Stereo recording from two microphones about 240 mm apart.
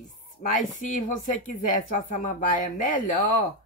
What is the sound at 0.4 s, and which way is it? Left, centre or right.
Speech, left.